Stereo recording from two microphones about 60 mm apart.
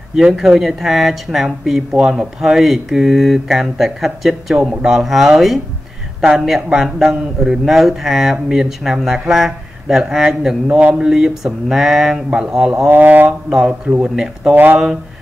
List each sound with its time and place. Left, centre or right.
0.1 s speech: centre
12.9 s speech: right
13.5 s speech: centre
14.5 s speech: right